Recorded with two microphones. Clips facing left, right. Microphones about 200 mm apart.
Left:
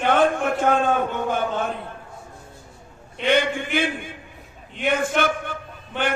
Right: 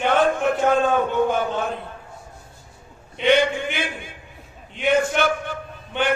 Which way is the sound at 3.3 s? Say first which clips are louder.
Right 2 dB; 55° left (ahead or behind).